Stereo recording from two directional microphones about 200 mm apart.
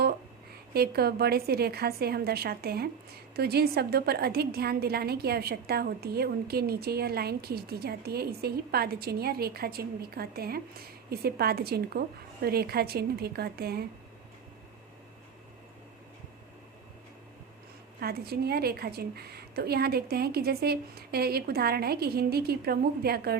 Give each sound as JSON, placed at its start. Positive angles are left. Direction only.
{"t": 0.7, "sound": "a woman's voice", "side_deg": -50}
{"t": 18.0, "sound": "a woman's voice", "side_deg": -50}